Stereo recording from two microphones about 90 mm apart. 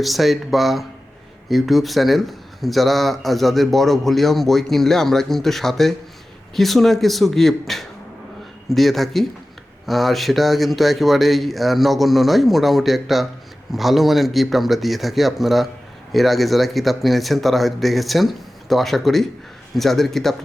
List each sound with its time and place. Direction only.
0.0 s speech: centre (ahead or behind)